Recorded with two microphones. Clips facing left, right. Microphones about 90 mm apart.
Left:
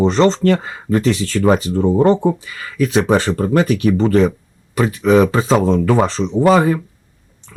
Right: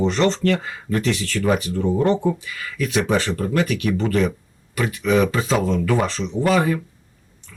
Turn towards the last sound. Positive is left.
turn(degrees=35)  # may be behind; listen again after turning